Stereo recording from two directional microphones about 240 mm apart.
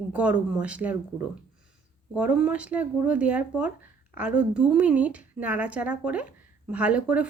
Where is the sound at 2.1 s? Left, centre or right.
Centre.